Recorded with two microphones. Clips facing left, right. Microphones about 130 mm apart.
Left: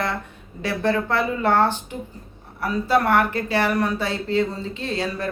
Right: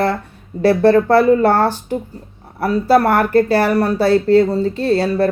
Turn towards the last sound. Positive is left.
turn(degrees=-35)  # may be behind; listen again after turning